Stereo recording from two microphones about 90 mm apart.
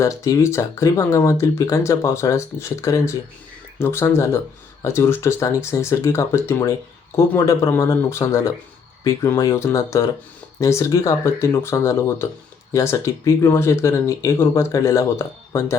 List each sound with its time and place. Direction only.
0.0 s speech: 35° left (ahead or behind)